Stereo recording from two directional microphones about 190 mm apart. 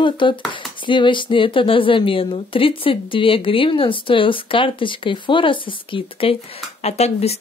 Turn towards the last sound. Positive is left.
turn(degrees=35)  # may be behind; listen again after turning